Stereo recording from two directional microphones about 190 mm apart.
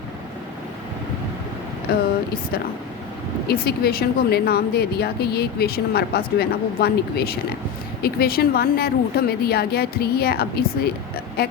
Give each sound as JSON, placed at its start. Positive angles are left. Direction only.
{"t": 1.9, "sound": "speech", "side_deg": 55}
{"t": 3.4, "sound": "a woman's voice", "side_deg": 55}